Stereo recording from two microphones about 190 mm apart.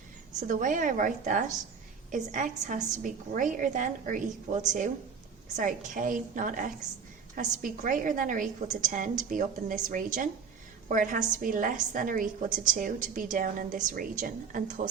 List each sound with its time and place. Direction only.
0.3 s a woman's voice: 40° right (ahead or behind)